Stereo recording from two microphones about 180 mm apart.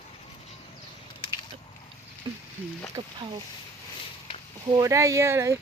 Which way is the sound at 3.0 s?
25° right (ahead or behind).